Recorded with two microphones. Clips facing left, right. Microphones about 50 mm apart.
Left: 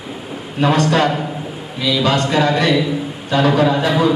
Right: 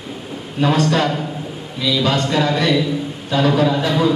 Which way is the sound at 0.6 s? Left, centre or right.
Centre.